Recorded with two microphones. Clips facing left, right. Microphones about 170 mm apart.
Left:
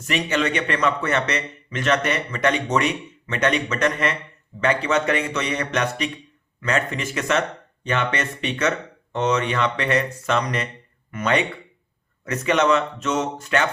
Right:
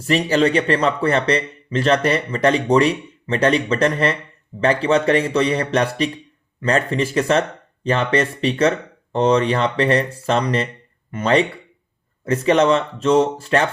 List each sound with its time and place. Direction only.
0.0 s a man's voice: 35° right (ahead or behind)